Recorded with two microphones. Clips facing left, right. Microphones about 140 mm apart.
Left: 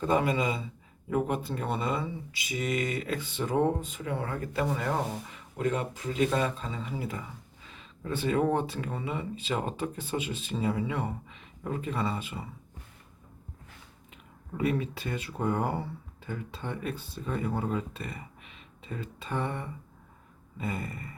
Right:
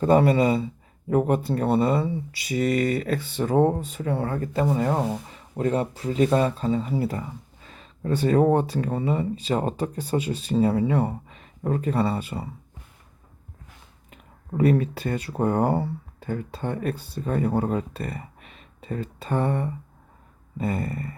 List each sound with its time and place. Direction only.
0.0 s speech: 40° right (ahead or behind)
14.1 s speech: 45° right (ahead or behind)